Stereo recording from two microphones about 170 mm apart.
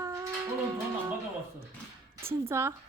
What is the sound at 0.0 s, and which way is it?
Livestock, 20° right (ahead or behind).